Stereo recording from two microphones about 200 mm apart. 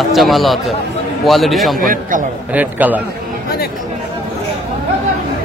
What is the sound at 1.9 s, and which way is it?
Speech, 40° right (ahead or behind).